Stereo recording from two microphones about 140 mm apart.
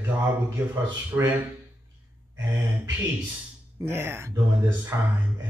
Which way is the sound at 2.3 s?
15° right (ahead or behind).